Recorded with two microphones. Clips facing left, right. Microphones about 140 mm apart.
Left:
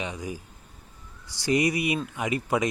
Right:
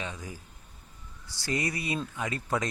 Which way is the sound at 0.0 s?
15° left (ahead or behind).